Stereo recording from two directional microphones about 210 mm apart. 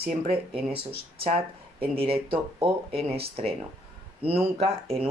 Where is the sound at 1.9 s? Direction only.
25° right (ahead or behind).